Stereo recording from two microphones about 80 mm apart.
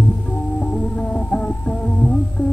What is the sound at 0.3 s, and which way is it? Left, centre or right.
Music, centre.